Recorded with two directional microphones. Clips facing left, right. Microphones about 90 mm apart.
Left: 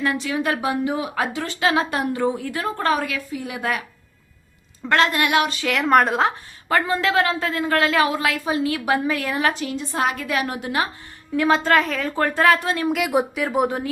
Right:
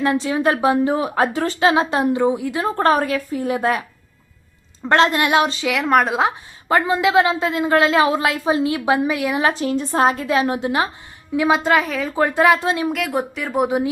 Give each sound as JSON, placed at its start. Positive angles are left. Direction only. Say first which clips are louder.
{"t": 0.0, "sound": "speech", "louder": "right 5 dB", "side_deg": -25}
{"t": 1.5, "sound": "a woman's voice", "louder": "right 3 dB", "side_deg": -25}
{"t": 2.7, "sound": "speech", "louder": "right 6 dB", "side_deg": -40}
{"t": 4.9, "sound": "a woman's voice", "louder": "right 3 dB", "side_deg": -25}
{"t": 5.6, "sound": "a woman's voice", "louder": "even", "side_deg": 0}
{"t": 6.7, "sound": "a woman's voice", "louder": "right 3 dB", "side_deg": -20}
{"t": 9.5, "sound": "a woman's voice", "louder": "right 5 dB", "side_deg": -30}
{"t": 11.3, "sound": "a woman's voice", "louder": "right 1 dB", "side_deg": -10}
{"t": 13.1, "sound": "speech", "louder": "left 2 dB", "side_deg": 10}
{"t": 13.4, "sound": "a woman's voice", "louder": "right 1 dB", "side_deg": 0}